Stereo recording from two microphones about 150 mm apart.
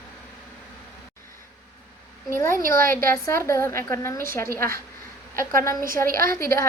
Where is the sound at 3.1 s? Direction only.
15° left (ahead or behind).